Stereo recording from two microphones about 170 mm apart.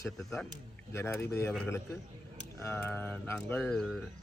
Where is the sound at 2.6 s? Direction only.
10° left (ahead or behind).